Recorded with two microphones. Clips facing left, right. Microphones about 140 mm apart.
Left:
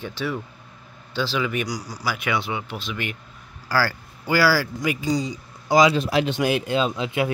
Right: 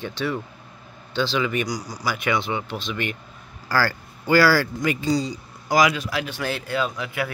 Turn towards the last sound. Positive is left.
turn(degrees=25)  # may be behind; listen again after turning